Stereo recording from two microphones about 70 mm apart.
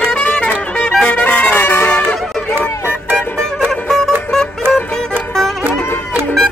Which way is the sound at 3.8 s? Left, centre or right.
Centre.